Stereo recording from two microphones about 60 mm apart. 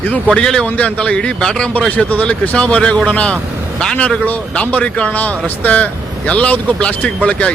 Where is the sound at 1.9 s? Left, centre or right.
Left.